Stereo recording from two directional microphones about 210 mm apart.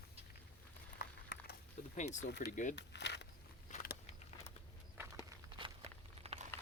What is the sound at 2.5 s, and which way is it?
Speech, 35° left (ahead or behind).